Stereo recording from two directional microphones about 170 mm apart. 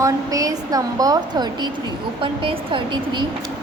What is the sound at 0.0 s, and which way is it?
A woman's voice, 20° right (ahead or behind).